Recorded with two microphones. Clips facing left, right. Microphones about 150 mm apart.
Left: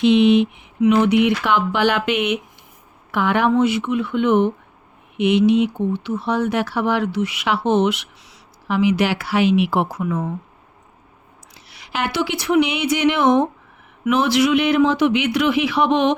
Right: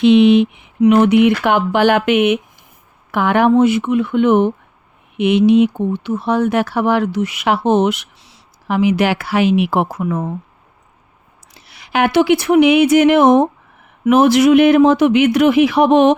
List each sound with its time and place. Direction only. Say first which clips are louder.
0.0 s speech: right 4 dB; 65° right (ahead or behind)
0.9 s speech: right 5 dB; 55° right (ahead or behind)
11.7 s speech: right 9 dB; 55° right (ahead or behind)